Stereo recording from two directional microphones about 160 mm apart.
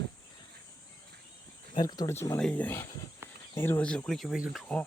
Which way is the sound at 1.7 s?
25° left (ahead or behind).